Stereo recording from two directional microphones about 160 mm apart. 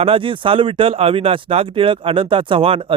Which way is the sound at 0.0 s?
35° right (ahead or behind).